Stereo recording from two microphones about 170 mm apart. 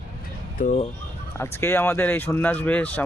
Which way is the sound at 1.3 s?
15° left (ahead or behind).